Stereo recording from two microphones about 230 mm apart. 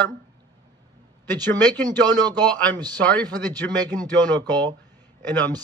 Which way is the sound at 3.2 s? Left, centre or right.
Centre.